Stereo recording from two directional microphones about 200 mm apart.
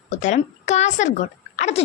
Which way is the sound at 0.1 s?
35° left (ahead or behind).